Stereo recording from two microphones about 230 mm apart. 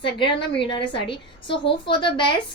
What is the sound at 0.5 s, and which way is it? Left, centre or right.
A woman's voice, left.